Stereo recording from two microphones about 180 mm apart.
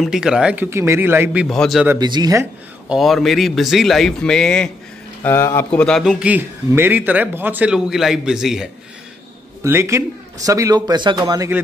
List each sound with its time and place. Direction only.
0.0 s a man's voice: 5° right (ahead or behind)
2.0 s speech: 25° right (ahead or behind)
2.9 s a man's voice: centre (ahead or behind)
5.2 s a man's voice: 15° left (ahead or behind); by 8.6 s 5° right (ahead or behind)
9.6 s a man's voice: 15° right (ahead or behind)